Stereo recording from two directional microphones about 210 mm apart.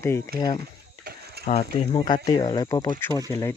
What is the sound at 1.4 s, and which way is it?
Speech, 35° left (ahead or behind).